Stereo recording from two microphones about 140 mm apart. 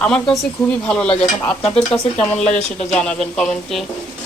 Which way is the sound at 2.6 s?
55° left (ahead or behind).